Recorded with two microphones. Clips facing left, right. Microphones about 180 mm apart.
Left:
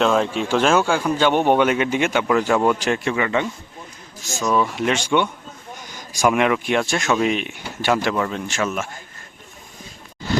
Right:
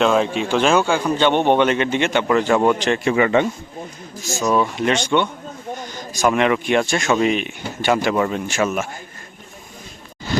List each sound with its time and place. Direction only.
0.0 s speech: 5° right (ahead or behind)
3.2 s speech: 25° right (ahead or behind)
4.4 s speech: 5° right (ahead or behind)
8.1 s speech: 10° right (ahead or behind)